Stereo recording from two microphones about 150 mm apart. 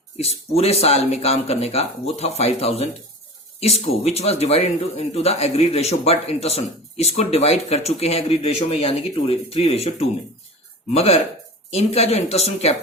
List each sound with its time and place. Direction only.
0.2 s a man's voice: 45° left (ahead or behind)